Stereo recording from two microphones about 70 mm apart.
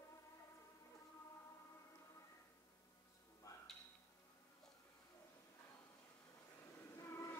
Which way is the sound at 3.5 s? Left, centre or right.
Left.